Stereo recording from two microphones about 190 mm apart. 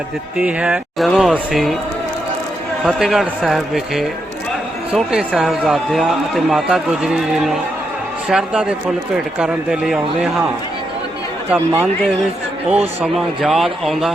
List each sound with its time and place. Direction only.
0.3 s a man's voice: 5° right (ahead or behind)
2.8 s a man's voice: centre (ahead or behind)
11.5 s a man's voice: 15° right (ahead or behind)